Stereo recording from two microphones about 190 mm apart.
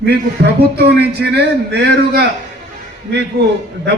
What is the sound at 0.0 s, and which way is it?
A man's voice, 60° right (ahead or behind).